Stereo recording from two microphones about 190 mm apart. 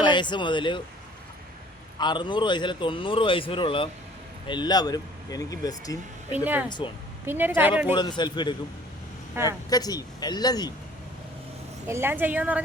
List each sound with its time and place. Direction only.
0.0 s speech: 25° left (ahead or behind)
2.0 s speech: 25° left (ahead or behind)
6.3 s a woman's voice: 10° right (ahead or behind)
6.7 s speech: 25° left (ahead or behind)
7.3 s a woman's voice: 10° right (ahead or behind)
7.9 s speech: 25° left (ahead or behind)
9.3 s a woman's voice: 15° right (ahead or behind)
9.6 s speech: 20° left (ahead or behind)
11.9 s a woman's voice: 10° right (ahead or behind)